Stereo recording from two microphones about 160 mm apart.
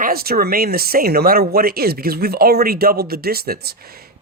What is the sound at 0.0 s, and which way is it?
Speech, 70° right (ahead or behind).